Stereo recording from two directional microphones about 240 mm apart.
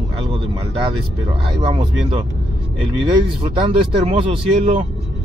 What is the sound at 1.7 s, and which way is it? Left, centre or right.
Speech, right.